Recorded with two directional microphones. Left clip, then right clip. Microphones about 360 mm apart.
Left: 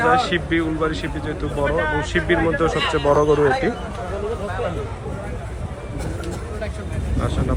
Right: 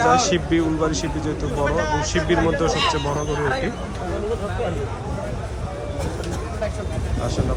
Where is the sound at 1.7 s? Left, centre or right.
Centre.